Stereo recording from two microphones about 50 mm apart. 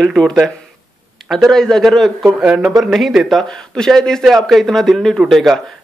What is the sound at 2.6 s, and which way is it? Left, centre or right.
Speech, centre.